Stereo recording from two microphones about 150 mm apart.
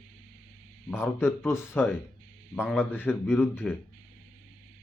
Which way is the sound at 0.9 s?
15° left (ahead or behind).